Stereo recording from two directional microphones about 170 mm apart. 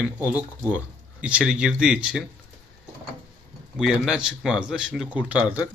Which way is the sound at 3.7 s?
5° right (ahead or behind).